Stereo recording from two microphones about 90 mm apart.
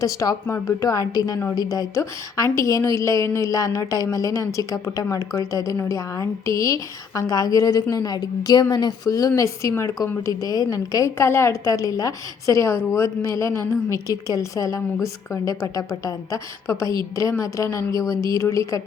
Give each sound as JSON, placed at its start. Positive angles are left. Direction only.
{"t": 0.0, "sound": "a woman's voice", "side_deg": 40}